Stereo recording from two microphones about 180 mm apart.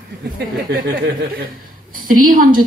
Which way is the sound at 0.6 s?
55° right (ahead or behind).